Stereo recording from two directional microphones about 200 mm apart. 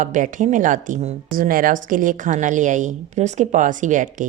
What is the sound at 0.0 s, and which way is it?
Speech, 40° right (ahead or behind).